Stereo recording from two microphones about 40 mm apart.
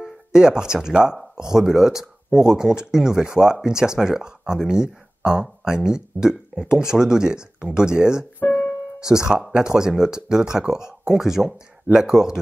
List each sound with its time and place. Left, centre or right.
0.0 s speech: centre
8.5 s music: left
9.0 s speech: centre